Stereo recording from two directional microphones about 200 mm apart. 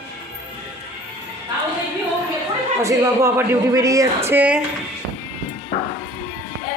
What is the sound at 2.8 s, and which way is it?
Speech, 15° right (ahead or behind).